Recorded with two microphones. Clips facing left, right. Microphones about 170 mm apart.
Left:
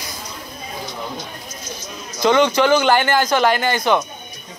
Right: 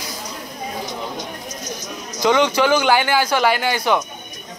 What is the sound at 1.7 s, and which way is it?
Speech, 15° right (ahead or behind).